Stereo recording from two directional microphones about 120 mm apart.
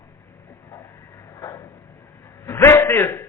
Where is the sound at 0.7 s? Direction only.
25° left (ahead or behind).